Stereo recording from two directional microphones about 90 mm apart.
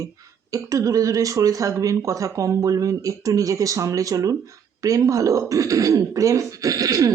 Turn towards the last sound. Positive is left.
turn(degrees=-40)  # may be behind; listen again after turning